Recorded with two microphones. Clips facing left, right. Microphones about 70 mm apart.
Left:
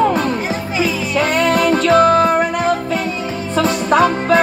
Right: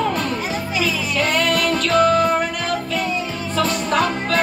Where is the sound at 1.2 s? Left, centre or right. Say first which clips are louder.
Left 5 dB; left.